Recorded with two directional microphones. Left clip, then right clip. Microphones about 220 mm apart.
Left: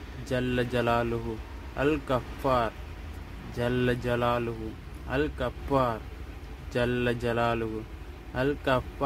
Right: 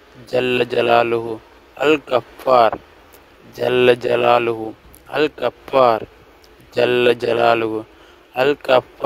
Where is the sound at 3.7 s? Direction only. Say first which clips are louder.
Right 15 dB; 45° right (ahead or behind).